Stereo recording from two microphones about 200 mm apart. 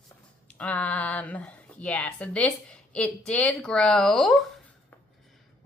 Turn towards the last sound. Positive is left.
turn(degrees=0)  # may be behind; listen again after turning